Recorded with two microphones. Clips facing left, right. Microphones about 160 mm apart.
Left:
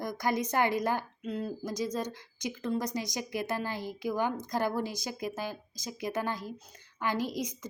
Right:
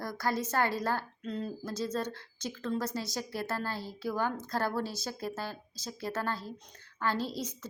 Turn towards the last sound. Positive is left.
turn(degrees=15)  # may be behind; listen again after turning